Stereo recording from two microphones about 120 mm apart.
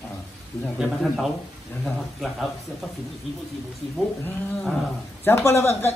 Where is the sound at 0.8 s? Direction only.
5° right (ahead or behind).